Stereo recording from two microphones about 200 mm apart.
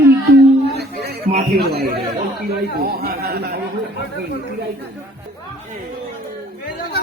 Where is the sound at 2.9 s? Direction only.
50° right (ahead or behind).